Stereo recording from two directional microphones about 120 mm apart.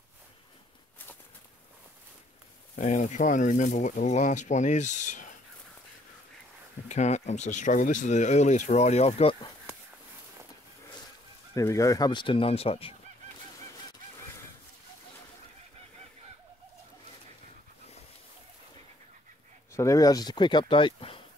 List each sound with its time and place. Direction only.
2.7 s speech: 90° left
6.9 s speech: 70° left (ahead or behind); by 9.4 s 55° left (ahead or behind)
11.5 s speech: 25° left (ahead or behind); by 12.9 s 50° left (ahead or behind)
19.7 s speech: 25° left (ahead or behind); by 21.2 s 45° left (ahead or behind)